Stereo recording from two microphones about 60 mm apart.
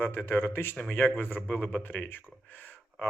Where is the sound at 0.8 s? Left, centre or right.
Left.